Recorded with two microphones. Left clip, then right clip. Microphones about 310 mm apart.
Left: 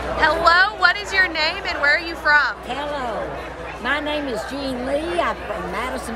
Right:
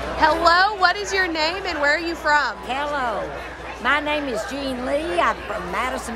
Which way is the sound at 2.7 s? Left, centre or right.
Centre.